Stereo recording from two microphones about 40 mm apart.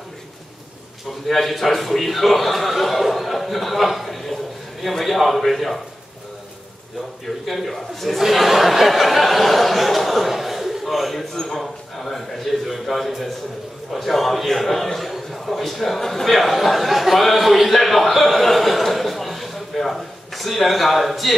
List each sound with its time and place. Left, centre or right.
1.2 s a man's voice: centre
7.2 s speech: centre
11.3 s a sound: centre
12.6 s a man's voice: centre